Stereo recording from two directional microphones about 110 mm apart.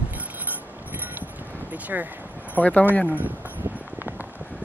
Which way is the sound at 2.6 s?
15° left (ahead or behind).